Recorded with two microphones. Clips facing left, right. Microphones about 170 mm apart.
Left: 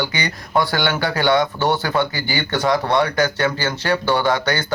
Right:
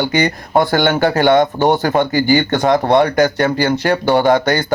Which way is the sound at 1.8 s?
45° right (ahead or behind).